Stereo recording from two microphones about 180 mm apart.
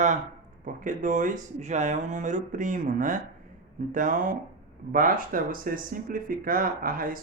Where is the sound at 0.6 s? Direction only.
45° right (ahead or behind).